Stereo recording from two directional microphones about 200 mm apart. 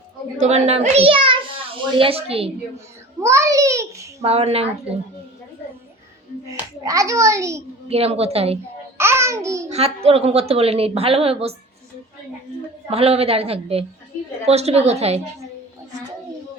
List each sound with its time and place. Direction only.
0.3 s a child's voice: 35° right (ahead or behind)
3.2 s a child's voice: 15° right (ahead or behind)
4.2 s a woman's voice: 30° right (ahead or behind)
6.5 s a child's voice: 15° right (ahead or behind)
7.9 s a woman's voice: 30° right (ahead or behind)
9.0 s babbling: 15° right (ahead or behind)
9.6 s a woman's voice: 30° right (ahead or behind)
12.9 s a woman's voice: 30° right (ahead or behind)